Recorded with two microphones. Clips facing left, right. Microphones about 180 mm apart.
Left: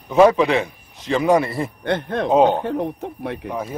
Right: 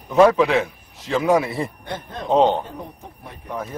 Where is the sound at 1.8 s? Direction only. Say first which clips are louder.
Left 10 dB; 70° left (ahead or behind).